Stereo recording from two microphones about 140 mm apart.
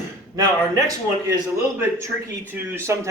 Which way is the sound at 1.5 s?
20° right (ahead or behind).